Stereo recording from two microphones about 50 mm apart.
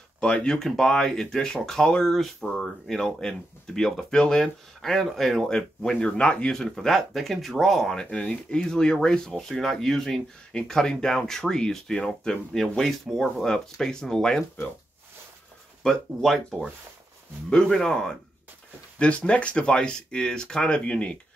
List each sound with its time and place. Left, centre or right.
0.2 s speech: centre
0.6 s speech: centre
8.0 s speech: centre
15.8 s speech: centre
17.6 s speech: centre
18.9 s speech: left